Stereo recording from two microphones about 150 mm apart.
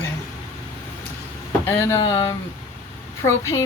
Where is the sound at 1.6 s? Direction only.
15° left (ahead or behind).